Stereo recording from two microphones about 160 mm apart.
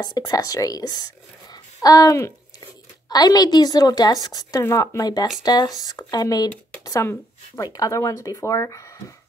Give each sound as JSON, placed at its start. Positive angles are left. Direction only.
{"t": 0.0, "sound": "speech", "side_deg": 25}